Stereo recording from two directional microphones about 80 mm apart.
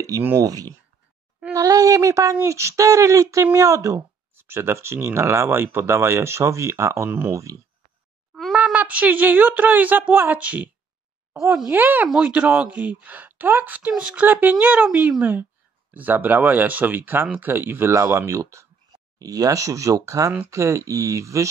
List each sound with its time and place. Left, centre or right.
0.4 s speech: right
7.1 s speech: right
8.4 s a sound: centre
8.7 s speech: centre
11.7 s speech: right